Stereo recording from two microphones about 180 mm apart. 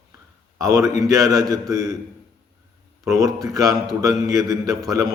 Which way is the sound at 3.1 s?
20° right (ahead or behind).